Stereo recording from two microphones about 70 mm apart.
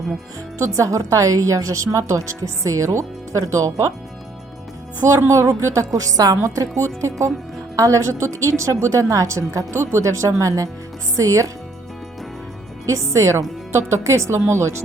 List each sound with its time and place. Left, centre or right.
0.6 s a woman's voice: right
5.3 s a woman's voice: right
12.8 s a woman's voice: right